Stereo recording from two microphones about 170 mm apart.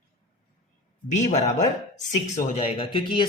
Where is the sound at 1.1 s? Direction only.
45° left (ahead or behind).